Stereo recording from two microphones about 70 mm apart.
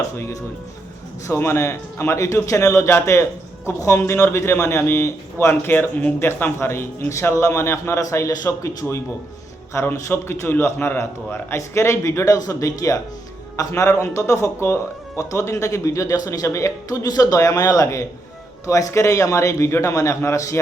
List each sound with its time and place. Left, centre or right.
1.3 s a man's voice: left